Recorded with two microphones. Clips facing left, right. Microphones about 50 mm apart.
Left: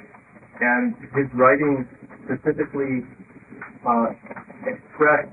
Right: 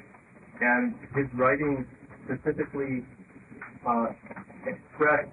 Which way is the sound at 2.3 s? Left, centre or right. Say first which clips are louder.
Left 7 dB; centre.